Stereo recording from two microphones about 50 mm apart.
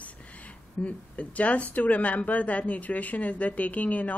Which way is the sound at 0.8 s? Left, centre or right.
Left.